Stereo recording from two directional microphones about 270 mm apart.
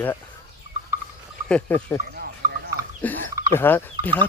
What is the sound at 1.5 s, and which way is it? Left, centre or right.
Speech, centre.